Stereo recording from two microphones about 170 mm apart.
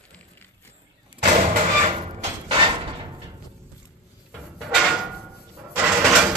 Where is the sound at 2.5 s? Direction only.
30° right (ahead or behind).